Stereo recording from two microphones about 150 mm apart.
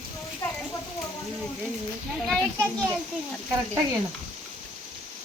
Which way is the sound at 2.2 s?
5° left (ahead or behind).